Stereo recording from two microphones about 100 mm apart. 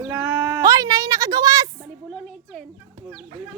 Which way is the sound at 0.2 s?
15° right (ahead or behind).